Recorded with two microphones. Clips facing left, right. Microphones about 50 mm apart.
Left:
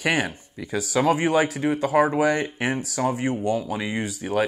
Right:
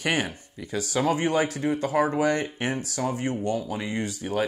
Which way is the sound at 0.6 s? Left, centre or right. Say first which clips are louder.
Left 4 dB; left.